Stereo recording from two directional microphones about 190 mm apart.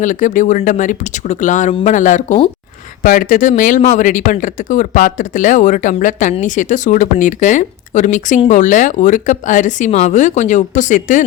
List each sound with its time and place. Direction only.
0.0 s speech: 40° left (ahead or behind)